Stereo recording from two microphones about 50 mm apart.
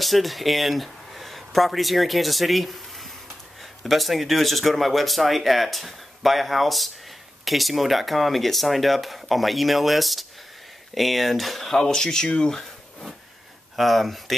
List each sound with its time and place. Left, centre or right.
0.0 s speech: centre
13.7 s speech: centre